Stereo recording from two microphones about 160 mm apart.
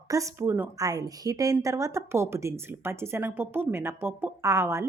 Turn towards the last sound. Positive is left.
turn(degrees=-15)  # may be behind; listen again after turning